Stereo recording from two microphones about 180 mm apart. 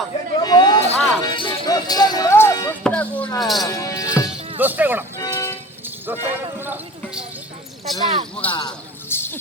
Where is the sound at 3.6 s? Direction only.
20° left (ahead or behind).